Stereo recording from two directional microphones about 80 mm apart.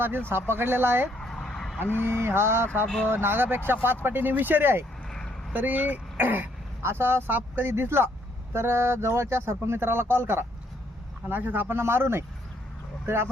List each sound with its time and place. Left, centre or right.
0.0 s speech: right
1.2 s a sound: centre
2.0 s speech: right
2.8 s speech: centre
3.1 s speech: right
5.1 s a sound: centre
5.5 s speech: right